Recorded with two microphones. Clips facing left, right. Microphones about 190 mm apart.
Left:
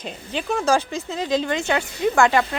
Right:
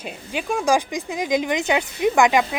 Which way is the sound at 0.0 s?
10° right (ahead or behind).